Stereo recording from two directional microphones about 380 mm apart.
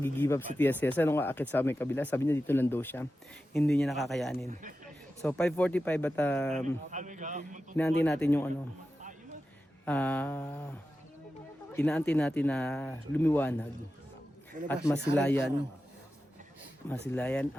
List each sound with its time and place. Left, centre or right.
0.0 s speech: centre
6.9 s a man's voice: centre
8.0 s speech: centre
9.8 s speech: centre
11.7 s speech: centre
15.1 s speech: centre
17.2 s speech: centre